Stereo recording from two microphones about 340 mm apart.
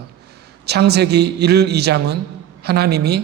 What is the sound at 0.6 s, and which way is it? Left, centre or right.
A man's voice, right.